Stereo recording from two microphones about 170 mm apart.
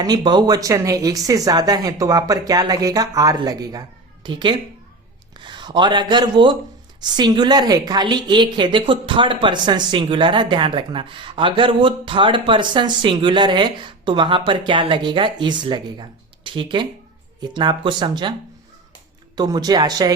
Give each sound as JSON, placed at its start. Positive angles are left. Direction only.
{"t": 0.0, "sound": "speech", "side_deg": -25}
{"t": 19.4, "sound": "speech", "side_deg": -25}